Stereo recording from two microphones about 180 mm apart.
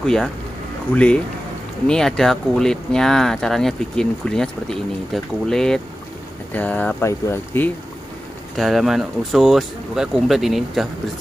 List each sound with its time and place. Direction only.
0.0 s speech: centre (ahead or behind)
8.5 s speech: centre (ahead or behind)